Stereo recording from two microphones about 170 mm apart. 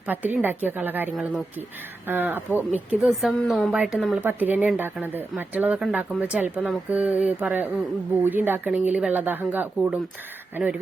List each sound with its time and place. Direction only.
0.1 s speech: 10° right (ahead or behind)
4.2 s speech: 10° right (ahead or behind)